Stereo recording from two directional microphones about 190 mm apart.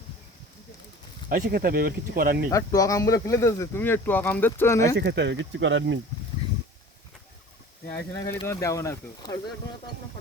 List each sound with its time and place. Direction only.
1.3 s speech: 50° right (ahead or behind)
2.5 s speech: 15° left (ahead or behind)
4.9 s speech: 65° right (ahead or behind)
8.1 s speech: 20° left (ahead or behind)